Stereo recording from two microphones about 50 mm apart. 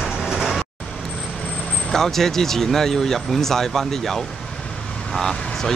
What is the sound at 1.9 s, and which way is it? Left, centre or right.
Speech, centre.